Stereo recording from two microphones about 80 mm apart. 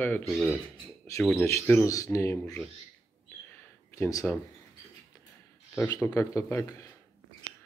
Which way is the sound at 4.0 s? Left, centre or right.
Left.